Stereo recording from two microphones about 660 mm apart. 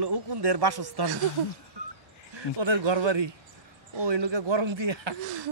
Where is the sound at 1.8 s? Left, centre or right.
Right.